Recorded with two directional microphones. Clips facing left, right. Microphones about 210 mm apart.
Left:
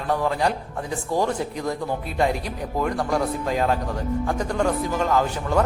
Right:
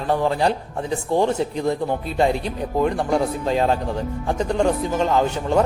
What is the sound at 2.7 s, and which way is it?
A man's voice, 25° right (ahead or behind).